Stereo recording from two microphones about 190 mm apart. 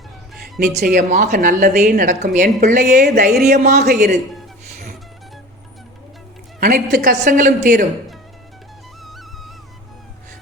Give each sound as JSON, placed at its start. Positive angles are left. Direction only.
{"t": 0.7, "sound": "a woman's voice", "side_deg": -45}
{"t": 3.6, "sound": "a woman's voice", "side_deg": -40}
{"t": 4.7, "sound": "music", "side_deg": -55}
{"t": 6.6, "sound": "a woman's voice", "side_deg": -50}
{"t": 9.0, "sound": "music", "side_deg": 0}